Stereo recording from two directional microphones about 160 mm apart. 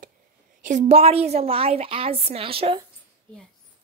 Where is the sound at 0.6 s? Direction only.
50° right (ahead or behind); by 2.8 s 35° right (ahead or behind).